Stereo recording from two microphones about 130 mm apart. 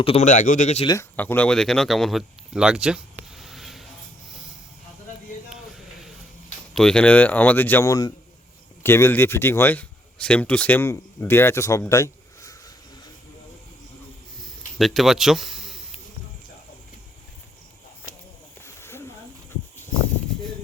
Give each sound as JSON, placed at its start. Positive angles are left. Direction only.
{"t": 0.0, "sound": "speech", "side_deg": 50}
{"t": 0.3, "sound": "speech", "side_deg": 80}
{"t": 1.1, "sound": "speech", "side_deg": 10}
{"t": 6.7, "sound": "speech", "side_deg": 5}
{"t": 7.9, "sound": "a man's voice", "side_deg": 30}
{"t": 8.8, "sound": "a man's voice", "side_deg": 20}
{"t": 14.8, "sound": "speech", "side_deg": 0}
{"t": 18.6, "sound": "a sound", "side_deg": 20}